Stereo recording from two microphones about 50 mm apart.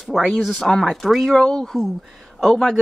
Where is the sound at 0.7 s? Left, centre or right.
Centre.